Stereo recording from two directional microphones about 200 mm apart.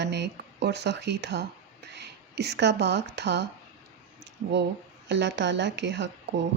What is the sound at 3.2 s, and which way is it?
Speech, 60° right (ahead or behind).